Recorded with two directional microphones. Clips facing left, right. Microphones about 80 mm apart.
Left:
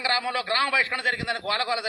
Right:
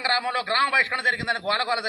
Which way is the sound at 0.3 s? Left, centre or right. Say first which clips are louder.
Right 2 dB; right.